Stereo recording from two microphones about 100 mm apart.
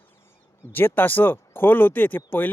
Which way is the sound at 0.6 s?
20° left (ahead or behind).